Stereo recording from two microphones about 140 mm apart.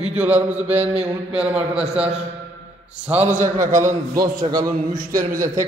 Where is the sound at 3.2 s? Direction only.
65° right (ahead or behind).